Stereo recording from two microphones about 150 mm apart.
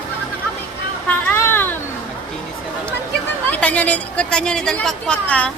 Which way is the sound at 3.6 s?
10° left (ahead or behind).